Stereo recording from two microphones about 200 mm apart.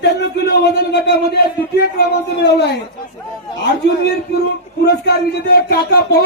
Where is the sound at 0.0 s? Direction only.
55° left (ahead or behind).